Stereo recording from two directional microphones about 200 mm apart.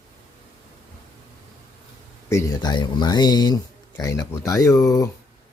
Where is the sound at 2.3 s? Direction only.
15° left (ahead or behind).